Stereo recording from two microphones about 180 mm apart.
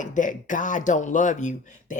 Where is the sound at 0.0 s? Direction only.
45° left (ahead or behind).